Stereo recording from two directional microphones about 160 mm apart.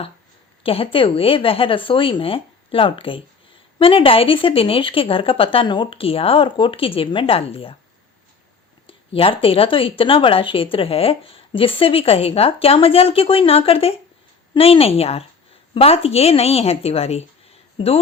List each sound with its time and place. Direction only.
0.6 s a woman's voice: 35° left (ahead or behind)
8.9 s a woman's voice: 35° left (ahead or behind)